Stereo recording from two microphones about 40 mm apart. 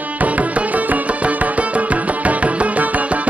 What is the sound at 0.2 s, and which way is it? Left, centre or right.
Music, right.